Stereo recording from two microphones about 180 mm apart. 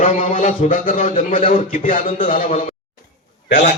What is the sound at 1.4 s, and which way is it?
Mantra, 40° left (ahead or behind).